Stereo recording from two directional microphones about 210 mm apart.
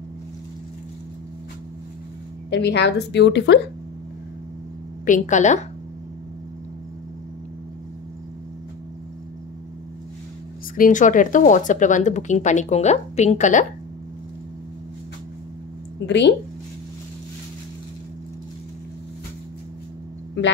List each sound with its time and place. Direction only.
2.5 s a woman's voice: 55° left (ahead or behind)
5.0 s speech: 35° left (ahead or behind)
10.8 s speech: 35° left (ahead or behind)
16.1 s a woman's voice: 55° left (ahead or behind)